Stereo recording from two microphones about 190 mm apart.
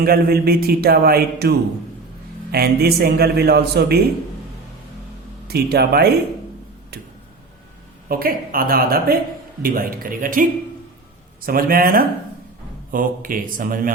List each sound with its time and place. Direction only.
0.0 s speech: 55° right (ahead or behind)
5.5 s speech: 55° right (ahead or behind)
8.0 s speech: 50° right (ahead or behind)
11.4 s speech: 50° right (ahead or behind)